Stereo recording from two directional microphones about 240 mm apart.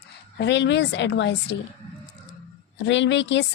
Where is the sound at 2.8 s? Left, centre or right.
Left.